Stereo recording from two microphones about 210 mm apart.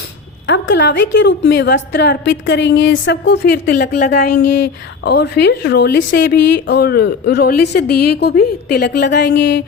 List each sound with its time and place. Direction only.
0.4 s a woman's voice: 55° left (ahead or behind)